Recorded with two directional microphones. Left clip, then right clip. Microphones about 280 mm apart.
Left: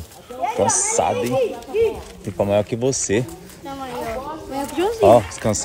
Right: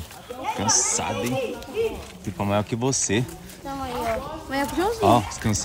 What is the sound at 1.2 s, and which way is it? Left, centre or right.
Speech, left.